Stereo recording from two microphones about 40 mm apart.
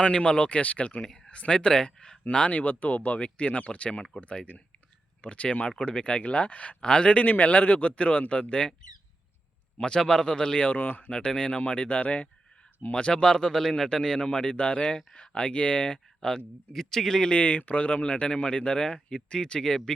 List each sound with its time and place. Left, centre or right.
0.0 s speech: left
1.0 s a sound: centre
1.3 s a man's voice: left
2.5 s speech: left
6.8 s a man's voice: left
7.3 s speech: left
9.7 s a man's voice: left
10.7 s speech: left
11.3 s speech: left
12.9 s a man's voice: left
16.7 s speech: centre
17.3 s speech: left
18.0 s a man's voice: left